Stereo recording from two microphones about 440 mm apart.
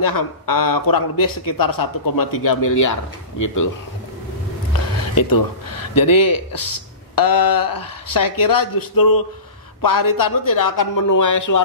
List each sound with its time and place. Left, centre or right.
0.0 s a man's voice: left
5.9 s a man's voice: left